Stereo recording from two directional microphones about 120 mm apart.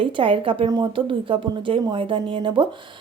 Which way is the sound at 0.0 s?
45° right (ahead or behind).